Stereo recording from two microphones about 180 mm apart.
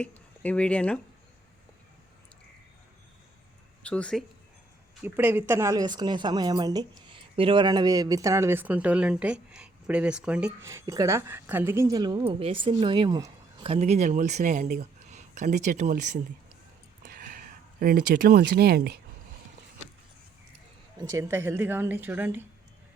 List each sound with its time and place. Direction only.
0.0 s speech: 5° left (ahead or behind)
3.8 s speech: 5° left (ahead or behind)
5.0 s a woman's voice: 10° right (ahead or behind)
13.7 s speech: 35° right (ahead or behind)
17.0 s a sound: 45° right (ahead or behind)
21.1 s a woman's voice: 15° right (ahead or behind)